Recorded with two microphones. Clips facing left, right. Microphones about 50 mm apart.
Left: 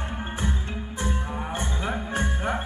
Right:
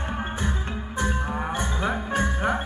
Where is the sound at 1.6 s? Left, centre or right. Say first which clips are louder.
Right 3 dB; right.